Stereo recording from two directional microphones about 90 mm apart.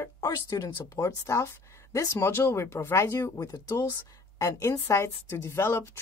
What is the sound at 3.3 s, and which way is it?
Speech, 45° left (ahead or behind).